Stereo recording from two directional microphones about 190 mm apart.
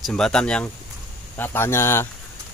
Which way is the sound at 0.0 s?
5° left (ahead or behind).